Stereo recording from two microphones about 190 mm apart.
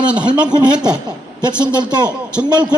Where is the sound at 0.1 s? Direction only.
5° right (ahead or behind).